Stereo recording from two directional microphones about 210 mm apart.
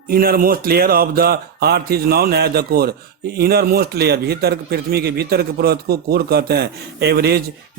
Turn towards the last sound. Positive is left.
turn(degrees=-50)  # may be behind; listen again after turning